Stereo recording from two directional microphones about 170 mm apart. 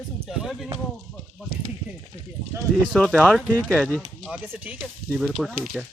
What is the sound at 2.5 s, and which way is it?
Speech, 15° right (ahead or behind).